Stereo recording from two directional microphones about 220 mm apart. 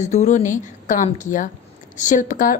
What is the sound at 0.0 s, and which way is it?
A woman's voice, 30° left (ahead or behind).